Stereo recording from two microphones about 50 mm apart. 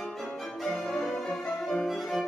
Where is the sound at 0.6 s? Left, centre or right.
Centre.